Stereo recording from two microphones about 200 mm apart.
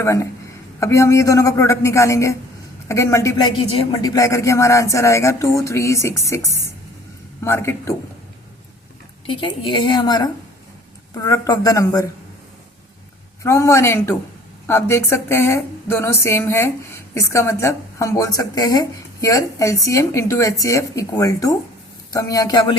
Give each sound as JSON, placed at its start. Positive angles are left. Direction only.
{"t": 0.0, "sound": "speech", "side_deg": 15}
{"t": 9.2, "sound": "a woman's voice", "side_deg": 25}
{"t": 13.4, "sound": "speech", "side_deg": 15}